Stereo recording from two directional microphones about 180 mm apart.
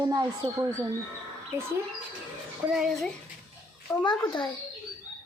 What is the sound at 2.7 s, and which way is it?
Speech, centre (ahead or behind).